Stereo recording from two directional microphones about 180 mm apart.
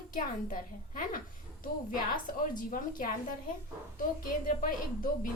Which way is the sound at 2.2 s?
50° left (ahead or behind).